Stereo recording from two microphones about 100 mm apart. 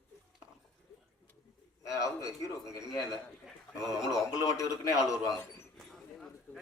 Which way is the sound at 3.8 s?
5° right (ahead or behind).